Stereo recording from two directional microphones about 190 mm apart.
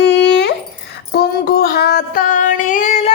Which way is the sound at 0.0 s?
65° left (ahead or behind).